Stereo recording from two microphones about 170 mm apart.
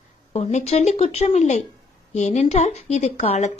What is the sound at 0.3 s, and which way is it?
A woman's voice, 40° left (ahead or behind).